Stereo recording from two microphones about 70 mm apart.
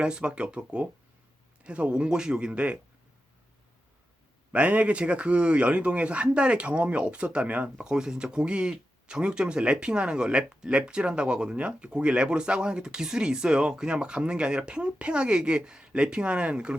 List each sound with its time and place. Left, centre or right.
0.0 s a man's voice: centre
4.5 s a man's voice: centre